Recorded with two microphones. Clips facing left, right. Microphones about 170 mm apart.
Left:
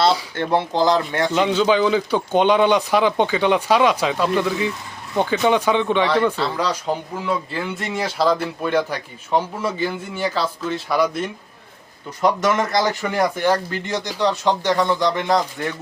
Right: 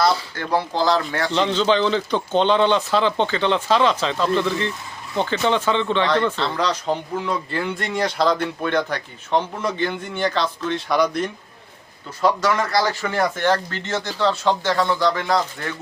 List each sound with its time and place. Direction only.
0.3 s speech: 20° left (ahead or behind); by 11.3 s 5° left (ahead or behind)
12.2 s speech: 20° left (ahead or behind)